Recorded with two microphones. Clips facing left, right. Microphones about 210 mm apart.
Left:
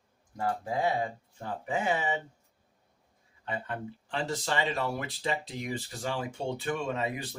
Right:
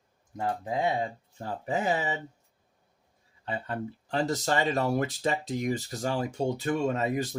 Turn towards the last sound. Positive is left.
turn(degrees=-45)  # may be behind; listen again after turning